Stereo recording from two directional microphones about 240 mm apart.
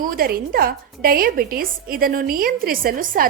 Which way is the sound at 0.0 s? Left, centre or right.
Right.